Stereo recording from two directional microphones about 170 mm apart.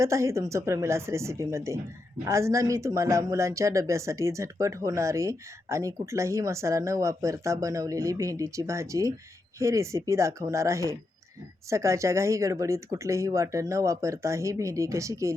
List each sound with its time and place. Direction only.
0.0 s speech: 15° right (ahead or behind)